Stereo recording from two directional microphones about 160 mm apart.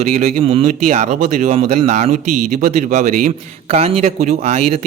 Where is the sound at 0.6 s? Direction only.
50° right (ahead or behind).